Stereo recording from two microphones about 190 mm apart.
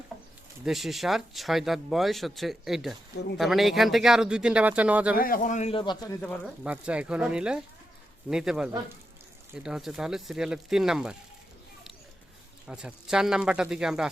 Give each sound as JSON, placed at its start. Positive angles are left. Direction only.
{"t": 0.6, "sound": "speech", "side_deg": 0}
{"t": 5.1, "sound": "speech", "side_deg": 50}
{"t": 6.2, "sound": "speech", "side_deg": 5}
{"t": 6.7, "sound": "speech", "side_deg": -5}
{"t": 12.6, "sound": "speech", "side_deg": -5}